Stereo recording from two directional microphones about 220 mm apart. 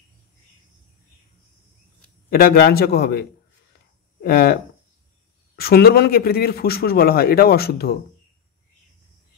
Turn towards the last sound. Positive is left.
turn(degrees=45)  # may be behind; listen again after turning